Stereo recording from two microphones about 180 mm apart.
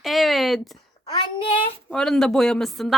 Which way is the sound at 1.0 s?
30° left (ahead or behind).